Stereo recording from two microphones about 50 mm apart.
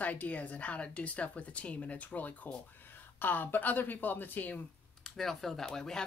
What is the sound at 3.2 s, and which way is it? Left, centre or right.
Speech, left.